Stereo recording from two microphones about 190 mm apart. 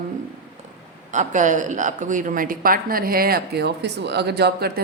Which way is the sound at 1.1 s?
40° right (ahead or behind).